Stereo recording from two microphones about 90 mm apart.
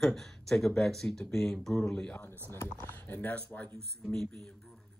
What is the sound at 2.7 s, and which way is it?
Speech, 40° right (ahead or behind).